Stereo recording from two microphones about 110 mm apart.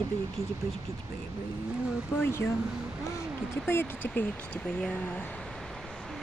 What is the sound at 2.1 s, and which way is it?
Speech, 20° left (ahead or behind).